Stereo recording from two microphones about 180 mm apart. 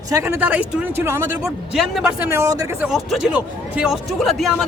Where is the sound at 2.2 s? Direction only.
15° right (ahead or behind).